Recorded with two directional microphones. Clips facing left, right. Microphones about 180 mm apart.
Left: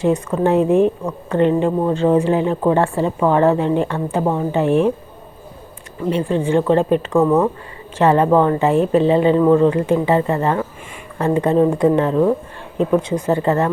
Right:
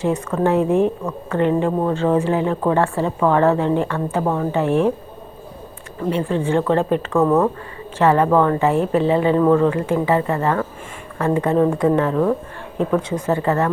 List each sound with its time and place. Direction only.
0.0 s speech: 15° left (ahead or behind)
6.1 s a woman's voice: 20° left (ahead or behind)
7.9 s speech: 20° left (ahead or behind)